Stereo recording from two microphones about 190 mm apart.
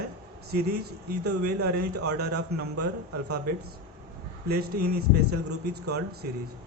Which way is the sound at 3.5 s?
55° right (ahead or behind).